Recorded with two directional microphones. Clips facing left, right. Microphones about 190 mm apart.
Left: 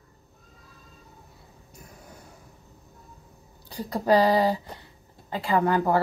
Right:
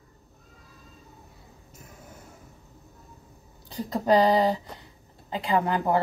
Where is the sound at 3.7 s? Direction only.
20° right (ahead or behind).